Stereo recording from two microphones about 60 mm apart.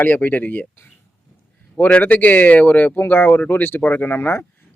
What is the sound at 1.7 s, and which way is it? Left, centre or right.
A man's voice, left.